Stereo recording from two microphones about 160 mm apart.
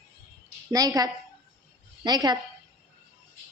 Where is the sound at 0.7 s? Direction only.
25° right (ahead or behind).